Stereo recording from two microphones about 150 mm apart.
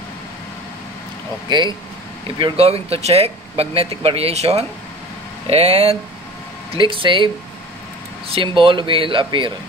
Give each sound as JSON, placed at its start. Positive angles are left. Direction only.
{"t": 1.5, "sound": "speech", "side_deg": -30}
{"t": 8.3, "sound": "speech", "side_deg": -35}